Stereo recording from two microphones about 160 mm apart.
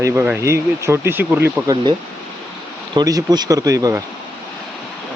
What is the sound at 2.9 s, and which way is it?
Speech, 25° right (ahead or behind).